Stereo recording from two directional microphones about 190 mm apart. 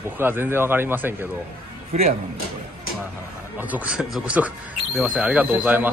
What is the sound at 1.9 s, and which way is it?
Speech, 35° right (ahead or behind).